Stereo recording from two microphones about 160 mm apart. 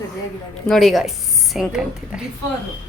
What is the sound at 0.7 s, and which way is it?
Speech, centre (ahead or behind).